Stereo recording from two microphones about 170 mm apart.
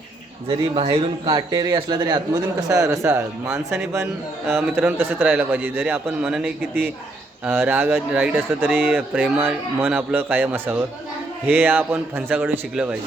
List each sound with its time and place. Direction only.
0.8 s a man's voice: 35° right (ahead or behind); by 13.0 s 10° right (ahead or behind)